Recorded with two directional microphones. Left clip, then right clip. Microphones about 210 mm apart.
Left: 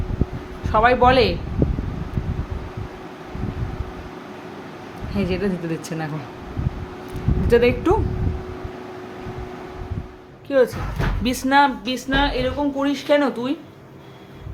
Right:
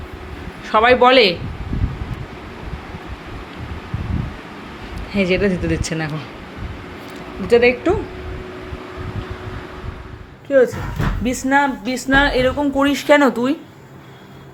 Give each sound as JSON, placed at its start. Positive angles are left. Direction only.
{"t": 0.7, "sound": "speech", "side_deg": -10}
{"t": 5.1, "sound": "speech", "side_deg": -10}
{"t": 7.4, "sound": "a woman's voice", "side_deg": 5}
{"t": 10.5, "sound": "a woman's voice", "side_deg": -10}
{"t": 12.0, "sound": "a woman's voice", "side_deg": -35}